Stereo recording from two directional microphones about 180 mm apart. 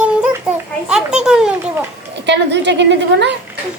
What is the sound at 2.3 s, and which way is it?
A woman's voice, 75° right (ahead or behind).